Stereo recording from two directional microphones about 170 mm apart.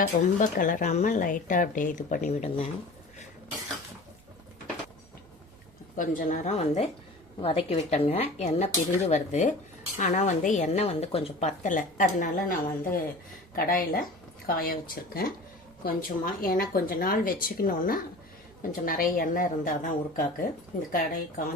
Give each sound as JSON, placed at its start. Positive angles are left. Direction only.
{"t": 0.0, "sound": "a woman's voice", "side_deg": 50}
{"t": 6.0, "sound": "a woman's voice", "side_deg": 50}